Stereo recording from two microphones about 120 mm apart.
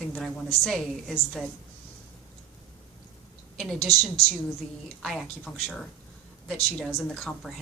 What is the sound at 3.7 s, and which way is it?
Speech, 55° left (ahead or behind).